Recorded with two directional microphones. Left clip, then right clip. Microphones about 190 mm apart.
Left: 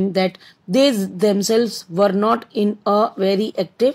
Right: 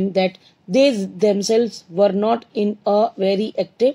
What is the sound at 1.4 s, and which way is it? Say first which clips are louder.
Speech: even; 30° left (ahead or behind).